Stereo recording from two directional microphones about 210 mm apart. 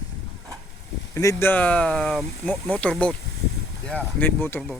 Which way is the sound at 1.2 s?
15° left (ahead or behind).